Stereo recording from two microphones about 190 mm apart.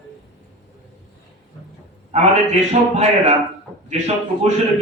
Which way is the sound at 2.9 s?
35° right (ahead or behind).